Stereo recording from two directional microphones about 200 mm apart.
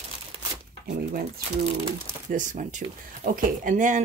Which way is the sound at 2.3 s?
40° right (ahead or behind).